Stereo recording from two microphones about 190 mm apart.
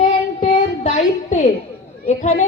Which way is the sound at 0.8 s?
40° left (ahead or behind).